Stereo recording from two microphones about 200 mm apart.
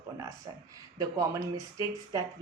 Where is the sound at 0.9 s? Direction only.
15° right (ahead or behind).